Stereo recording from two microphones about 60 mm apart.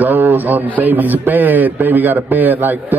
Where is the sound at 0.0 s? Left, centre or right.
Right.